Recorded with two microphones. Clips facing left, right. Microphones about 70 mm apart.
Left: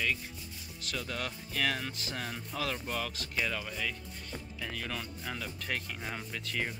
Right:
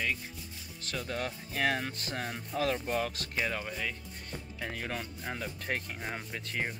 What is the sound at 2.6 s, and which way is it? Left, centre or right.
Speech, right.